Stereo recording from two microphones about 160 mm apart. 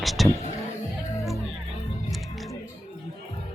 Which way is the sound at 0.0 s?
Centre (ahead or behind).